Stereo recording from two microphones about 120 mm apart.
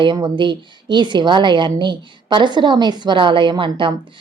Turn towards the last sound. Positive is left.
turn(degrees=-45)  # may be behind; listen again after turning